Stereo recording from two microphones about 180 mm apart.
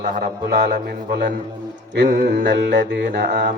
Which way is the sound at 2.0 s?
70° right (ahead or behind).